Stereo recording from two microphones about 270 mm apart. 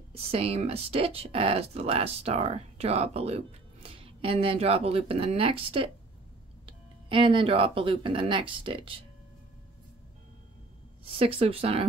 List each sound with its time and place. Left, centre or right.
0.1 s speech: right
11.1 s speech: right